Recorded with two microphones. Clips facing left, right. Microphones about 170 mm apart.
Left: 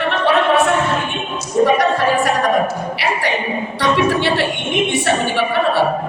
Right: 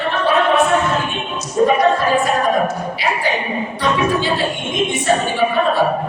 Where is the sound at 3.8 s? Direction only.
70° left (ahead or behind).